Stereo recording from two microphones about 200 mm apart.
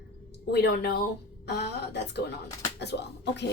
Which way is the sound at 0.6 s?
50° left (ahead or behind).